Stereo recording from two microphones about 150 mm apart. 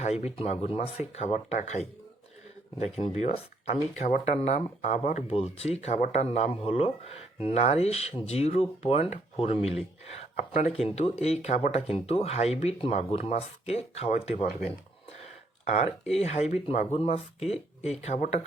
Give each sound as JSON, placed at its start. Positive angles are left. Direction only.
{"t": 0.0, "sound": "speech", "side_deg": 45}
{"t": 10.8, "sound": "speech", "side_deg": 45}
{"t": 15.7, "sound": "speech", "side_deg": 45}